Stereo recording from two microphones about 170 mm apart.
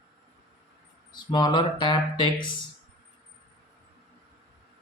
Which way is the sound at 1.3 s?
25° left (ahead or behind).